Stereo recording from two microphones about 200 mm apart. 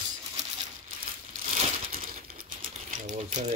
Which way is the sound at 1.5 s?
35° right (ahead or behind).